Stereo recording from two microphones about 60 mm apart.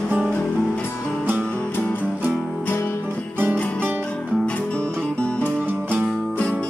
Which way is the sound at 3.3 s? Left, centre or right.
Right.